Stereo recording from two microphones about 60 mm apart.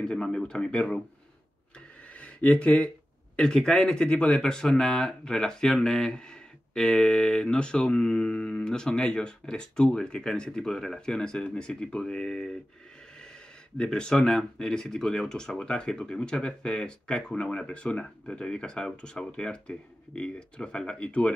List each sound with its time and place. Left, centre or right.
0.0 s speech: centre
2.1 s speech: left
13.7 s speech: centre